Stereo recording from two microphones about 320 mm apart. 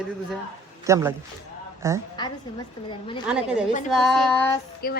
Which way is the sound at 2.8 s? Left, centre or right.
Centre.